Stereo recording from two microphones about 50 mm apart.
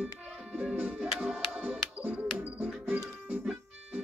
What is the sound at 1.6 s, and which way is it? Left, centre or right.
Music, right.